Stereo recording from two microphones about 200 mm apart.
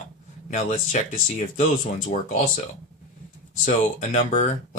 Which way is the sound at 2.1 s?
40° left (ahead or behind).